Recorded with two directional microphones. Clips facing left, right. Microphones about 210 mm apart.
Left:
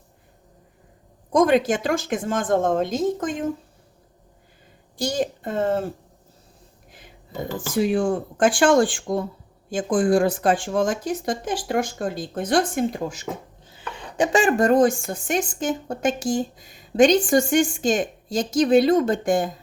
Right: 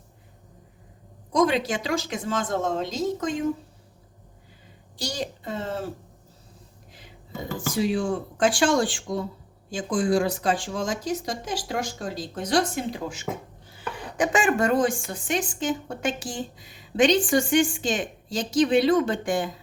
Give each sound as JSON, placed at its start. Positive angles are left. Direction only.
{"t": 1.3, "sound": "a woman's voice", "side_deg": 50}
{"t": 4.9, "sound": "a woman's voice", "side_deg": 50}
{"t": 7.8, "sound": "a woman's voice", "side_deg": 50}
{"t": 13.7, "sound": "chopping", "side_deg": 20}
{"t": 14.3, "sound": "a woman's voice", "side_deg": 35}